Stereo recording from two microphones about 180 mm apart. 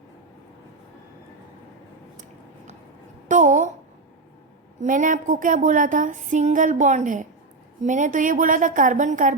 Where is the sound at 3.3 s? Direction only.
45° right (ahead or behind).